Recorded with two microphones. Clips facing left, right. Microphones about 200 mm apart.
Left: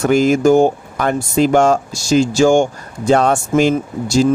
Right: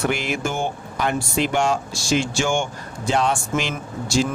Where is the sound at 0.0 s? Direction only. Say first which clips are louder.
Left 12 dB; 45° left (ahead or behind).